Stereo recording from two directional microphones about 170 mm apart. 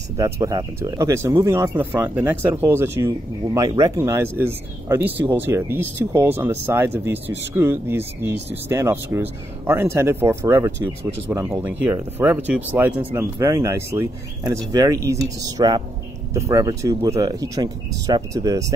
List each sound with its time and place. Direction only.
0.2 s speech: 20° right (ahead or behind)